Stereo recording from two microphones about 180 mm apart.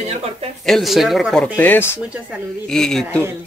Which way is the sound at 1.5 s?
10° left (ahead or behind).